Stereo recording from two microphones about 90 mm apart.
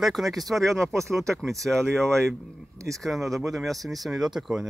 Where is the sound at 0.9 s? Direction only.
30° right (ahead or behind).